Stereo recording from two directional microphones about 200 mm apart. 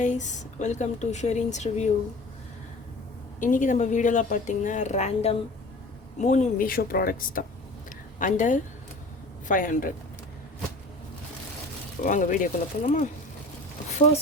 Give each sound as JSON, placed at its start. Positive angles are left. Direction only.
{"t": 0.0, "sound": "speech", "side_deg": 35}
{"t": 3.4, "sound": "speech", "side_deg": 40}
{"t": 12.0, "sound": "speech", "side_deg": 40}